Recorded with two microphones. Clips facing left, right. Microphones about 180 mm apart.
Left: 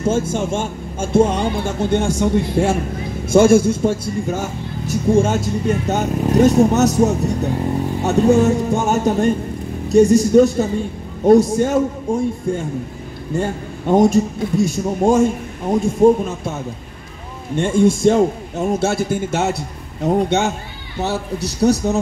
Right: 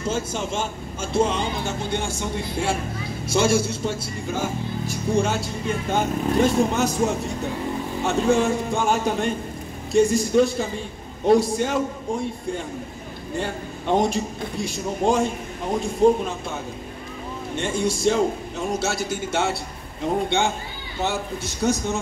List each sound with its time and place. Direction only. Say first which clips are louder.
0.0 s a man's voice: left 7 dB; 50° left (ahead or behind)
13.3 s a man's voice: left 6 dB; 45° left (ahead or behind)
17.6 s a man's voice: left 10 dB; 45° left (ahead or behind)